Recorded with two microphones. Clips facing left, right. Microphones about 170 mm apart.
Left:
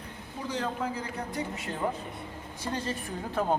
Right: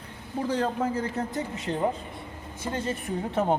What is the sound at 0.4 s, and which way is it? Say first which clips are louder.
Speech: right 5 dB; 45° right (ahead or behind).